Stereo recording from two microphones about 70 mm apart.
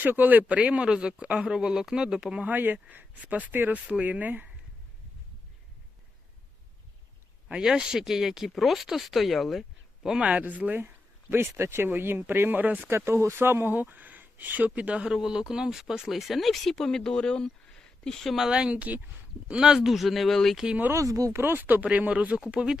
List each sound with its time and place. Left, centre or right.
0.0 s speech: right
2.5 s speech: right
7.4 s speech: centre
10.2 s speech: right
10.8 s speech: right; by 18.4 s centre
18.4 s speech: centre
20.7 s speech: right
20.9 s speech: right
21.3 s speech: right; by 22.8 s centre